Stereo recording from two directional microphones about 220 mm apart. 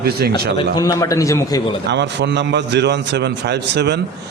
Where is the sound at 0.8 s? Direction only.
15° left (ahead or behind).